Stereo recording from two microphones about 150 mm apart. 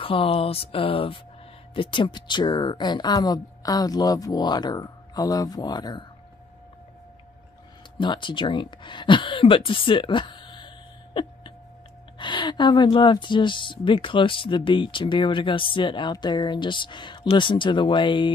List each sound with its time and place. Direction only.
0.0 s a woman's voice: 35° left (ahead or behind)
8.0 s a woman's voice: 35° left (ahead or behind)
12.2 s a woman's voice: 30° left (ahead or behind)